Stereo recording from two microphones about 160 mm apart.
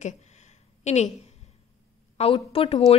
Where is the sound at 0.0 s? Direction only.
45° left (ahead or behind).